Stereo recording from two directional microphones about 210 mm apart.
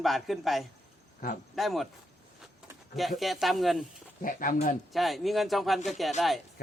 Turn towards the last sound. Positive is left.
turn(degrees=0)  # may be behind; listen again after turning